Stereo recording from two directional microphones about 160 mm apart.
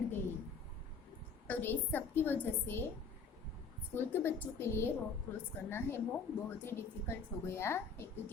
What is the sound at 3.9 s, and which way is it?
Speech, 15° left (ahead or behind).